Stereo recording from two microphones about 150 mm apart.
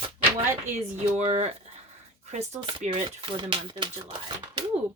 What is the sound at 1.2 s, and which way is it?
Speech, 45° right (ahead or behind).